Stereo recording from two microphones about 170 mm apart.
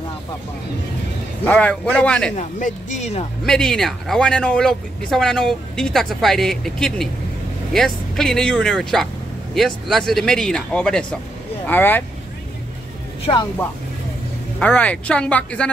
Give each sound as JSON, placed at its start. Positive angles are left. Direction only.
{"t": 1.4, "sound": "speech", "side_deg": 10}
{"t": 2.3, "sound": "speech", "side_deg": 45}
{"t": 3.4, "sound": "speech", "side_deg": 5}
{"t": 13.2, "sound": "speech", "side_deg": 30}
{"t": 14.6, "sound": "speech", "side_deg": 10}